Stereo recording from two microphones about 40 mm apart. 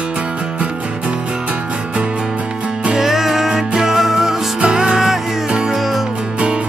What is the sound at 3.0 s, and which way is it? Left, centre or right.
Music, centre.